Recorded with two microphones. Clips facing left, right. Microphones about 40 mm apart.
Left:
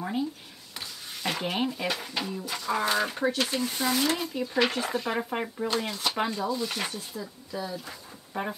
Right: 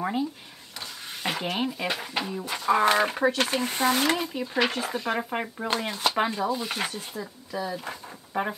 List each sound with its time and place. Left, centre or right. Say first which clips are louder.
1.2 s stir: right 1 dB; centre
1.5 s speech: right 1 dB; centre
2.4 s speech: right 8 dB; right
4.2 s speech: right 1 dB; right
4.6 s speech: even; centre
5.8 s speech: right 5 dB; right
7.0 s speech: right 2 dB; right
8.3 s speech: right 4 dB; centre